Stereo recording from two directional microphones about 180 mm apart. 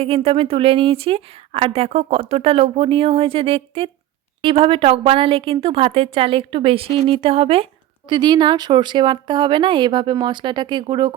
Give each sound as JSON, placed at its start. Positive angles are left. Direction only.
{"t": 0.0, "sound": "speech", "side_deg": -35}